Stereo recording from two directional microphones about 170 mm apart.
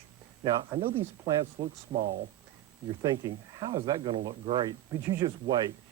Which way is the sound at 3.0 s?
20° right (ahead or behind).